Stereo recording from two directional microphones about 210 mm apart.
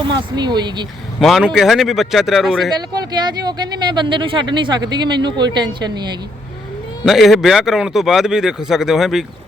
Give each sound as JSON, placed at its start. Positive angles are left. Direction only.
{"t": 0.0, "sound": "speech", "side_deg": -20}
{"t": 1.2, "sound": "a man's voice", "side_deg": 0}
{"t": 2.9, "sound": "speech", "side_deg": -20}
{"t": 7.0, "sound": "a man's voice", "side_deg": 0}